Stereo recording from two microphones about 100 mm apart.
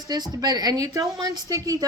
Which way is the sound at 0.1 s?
40° right (ahead or behind).